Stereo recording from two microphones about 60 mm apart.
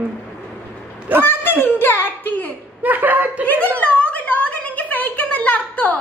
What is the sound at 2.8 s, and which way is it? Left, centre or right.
Speech, right.